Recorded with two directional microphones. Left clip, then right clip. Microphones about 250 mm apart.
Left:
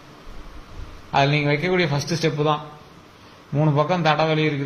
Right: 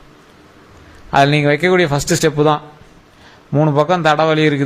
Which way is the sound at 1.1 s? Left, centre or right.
Right.